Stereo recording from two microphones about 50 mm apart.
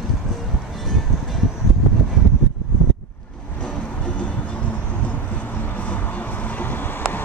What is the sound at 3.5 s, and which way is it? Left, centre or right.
Vehicle, left.